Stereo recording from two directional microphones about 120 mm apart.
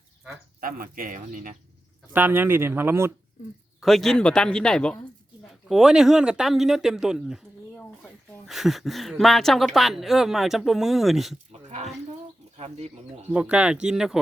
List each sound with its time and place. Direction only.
1.1 s speech: 90° right
2.1 s speech: 15° right (ahead or behind)
3.8 s a man's voice: centre (ahead or behind)
7.8 s a sound: 15° left (ahead or behind)
8.4 s speech: centre (ahead or behind)
12.5 s bird: 60° right (ahead or behind)
13.3 s speech: 10° right (ahead or behind)